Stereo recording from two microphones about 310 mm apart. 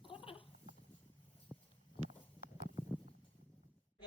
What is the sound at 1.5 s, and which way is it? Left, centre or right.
Horse, centre.